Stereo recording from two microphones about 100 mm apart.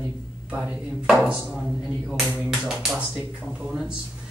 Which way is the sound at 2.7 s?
5° right (ahead or behind).